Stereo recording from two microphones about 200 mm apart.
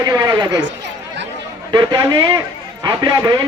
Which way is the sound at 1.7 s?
25° right (ahead or behind).